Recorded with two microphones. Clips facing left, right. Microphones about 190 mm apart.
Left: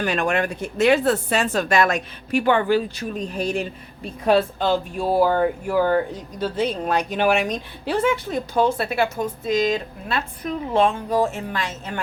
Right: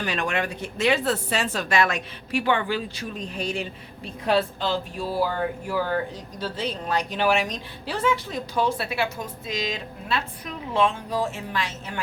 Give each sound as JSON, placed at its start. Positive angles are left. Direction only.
{"t": 0.0, "sound": "speech", "side_deg": 50}